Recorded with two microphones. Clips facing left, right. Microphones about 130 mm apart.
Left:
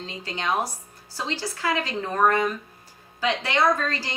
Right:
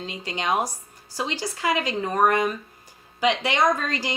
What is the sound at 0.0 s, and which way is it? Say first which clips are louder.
Speech: right 1 dB; 15° right (ahead or behind).